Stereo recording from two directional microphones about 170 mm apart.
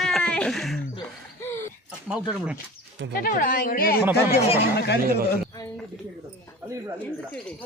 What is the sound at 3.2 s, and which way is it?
Speech, 55° left (ahead or behind).